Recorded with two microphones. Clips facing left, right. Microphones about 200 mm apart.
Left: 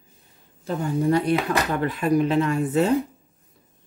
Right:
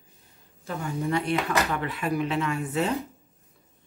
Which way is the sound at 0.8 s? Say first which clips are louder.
Left 6 dB; 40° left (ahead or behind).